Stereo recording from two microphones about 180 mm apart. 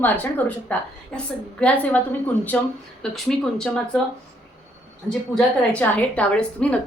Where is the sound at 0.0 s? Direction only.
10° left (ahead or behind).